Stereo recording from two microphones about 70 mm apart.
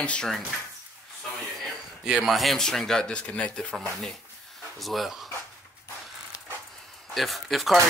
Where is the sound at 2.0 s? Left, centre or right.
Centre.